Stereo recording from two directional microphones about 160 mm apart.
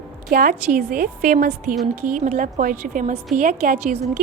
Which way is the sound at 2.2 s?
50° right (ahead or behind).